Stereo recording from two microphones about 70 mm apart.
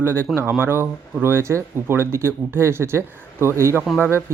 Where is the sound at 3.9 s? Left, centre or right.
Centre.